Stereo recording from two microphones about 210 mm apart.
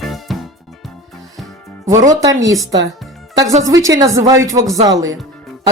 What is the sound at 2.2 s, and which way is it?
Speech, 15° right (ahead or behind).